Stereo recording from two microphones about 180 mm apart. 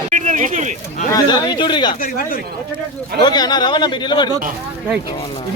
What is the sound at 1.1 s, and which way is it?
Speech, 20° left (ahead or behind).